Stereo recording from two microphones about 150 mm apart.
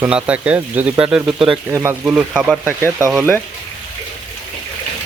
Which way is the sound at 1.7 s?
20° right (ahead or behind).